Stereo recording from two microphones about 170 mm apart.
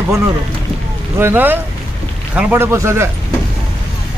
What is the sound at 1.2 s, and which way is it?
Speech, 10° right (ahead or behind).